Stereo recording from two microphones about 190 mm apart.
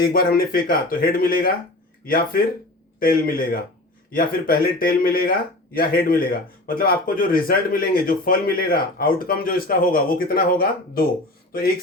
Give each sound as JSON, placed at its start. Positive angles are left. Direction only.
{"t": 0.0, "sound": "speech", "side_deg": 50}